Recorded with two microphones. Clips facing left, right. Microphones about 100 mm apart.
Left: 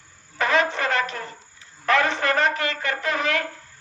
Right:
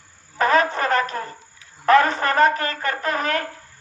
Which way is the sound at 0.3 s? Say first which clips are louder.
Right 3 dB; 40° right (ahead or behind).